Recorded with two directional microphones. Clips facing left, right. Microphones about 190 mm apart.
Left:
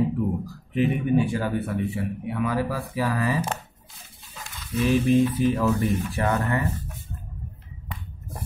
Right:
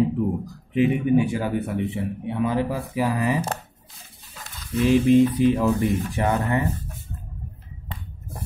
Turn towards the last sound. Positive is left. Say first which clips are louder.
# right 2 dB
turn(degrees=-20)  # may be behind; listen again after turning